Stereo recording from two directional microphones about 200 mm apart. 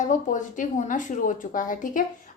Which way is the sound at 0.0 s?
40° left (ahead or behind).